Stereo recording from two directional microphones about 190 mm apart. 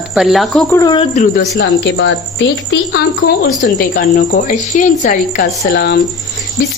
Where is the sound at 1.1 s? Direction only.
50° left (ahead or behind).